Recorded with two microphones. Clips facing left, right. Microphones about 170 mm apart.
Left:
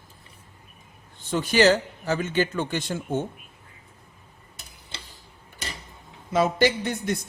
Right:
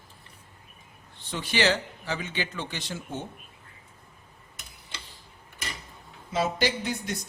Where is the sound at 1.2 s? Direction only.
45° left (ahead or behind).